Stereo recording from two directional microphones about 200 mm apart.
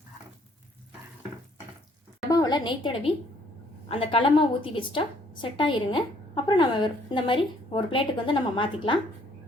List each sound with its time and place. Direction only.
2.3 s a woman's voice: 20° left (ahead or behind)